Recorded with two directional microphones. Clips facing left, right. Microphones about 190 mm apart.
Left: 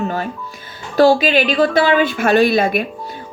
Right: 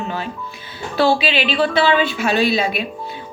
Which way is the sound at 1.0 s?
45° left (ahead or behind).